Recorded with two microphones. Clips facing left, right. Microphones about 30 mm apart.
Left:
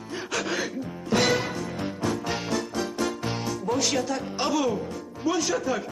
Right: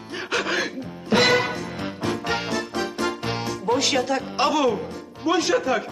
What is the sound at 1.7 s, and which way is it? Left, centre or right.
Music, right.